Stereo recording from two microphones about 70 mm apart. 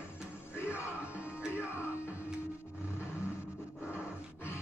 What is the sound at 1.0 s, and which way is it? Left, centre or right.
Music, centre.